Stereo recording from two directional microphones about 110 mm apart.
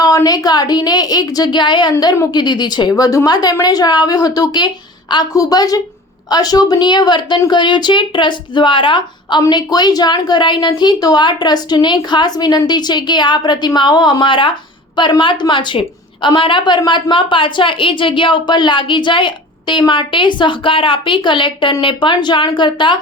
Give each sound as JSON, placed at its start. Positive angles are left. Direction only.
{"t": 0.0, "sound": "a woman's voice", "side_deg": 35}